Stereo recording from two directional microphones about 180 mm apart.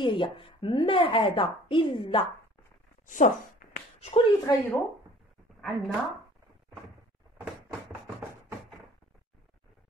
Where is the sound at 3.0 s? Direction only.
45° left (ahead or behind).